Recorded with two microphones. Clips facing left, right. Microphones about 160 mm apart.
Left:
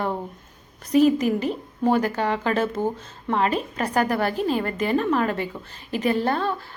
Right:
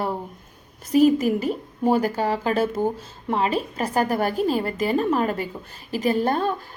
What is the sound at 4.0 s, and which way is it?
A woman's voice, 40° right (ahead or behind).